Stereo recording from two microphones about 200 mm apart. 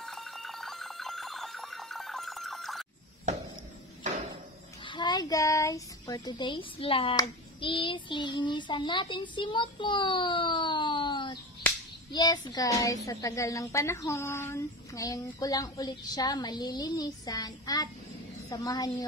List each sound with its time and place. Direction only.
0.0 s music: centre (ahead or behind)
3.3 s a sound: 35° right (ahead or behind)
4.8 s a child's voice: 25° left (ahead or behind)